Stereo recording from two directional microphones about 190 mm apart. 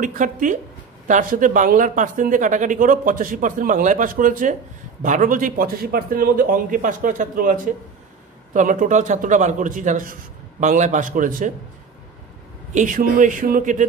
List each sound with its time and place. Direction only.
0.0 s a man's voice: 45° right (ahead or behind)
12.7 s speech: 45° right (ahead or behind)